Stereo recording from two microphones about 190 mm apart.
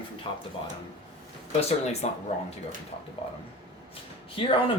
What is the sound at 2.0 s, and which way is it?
Speech, 35° left (ahead or behind).